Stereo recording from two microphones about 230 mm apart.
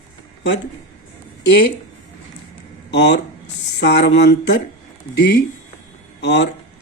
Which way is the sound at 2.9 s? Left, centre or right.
Left.